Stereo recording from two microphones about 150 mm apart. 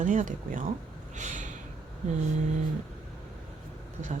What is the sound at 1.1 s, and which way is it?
Snort, 55° right (ahead or behind).